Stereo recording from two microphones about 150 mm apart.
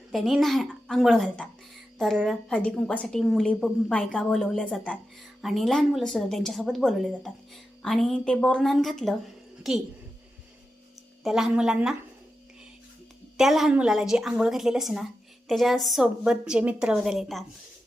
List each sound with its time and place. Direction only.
0.1 s a woman's voice: centre (ahead or behind)
11.2 s a woman's voice: 5° right (ahead or behind)
13.3 s a woman's voice: centre (ahead or behind)